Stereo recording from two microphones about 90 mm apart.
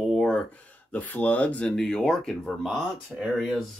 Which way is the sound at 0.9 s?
20° left (ahead or behind).